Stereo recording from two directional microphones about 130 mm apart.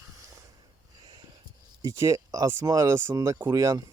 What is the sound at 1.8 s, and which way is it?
Speech, 20° right (ahead or behind).